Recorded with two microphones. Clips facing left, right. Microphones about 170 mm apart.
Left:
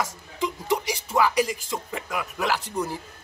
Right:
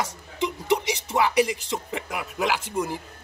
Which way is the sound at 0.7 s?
20° right (ahead or behind).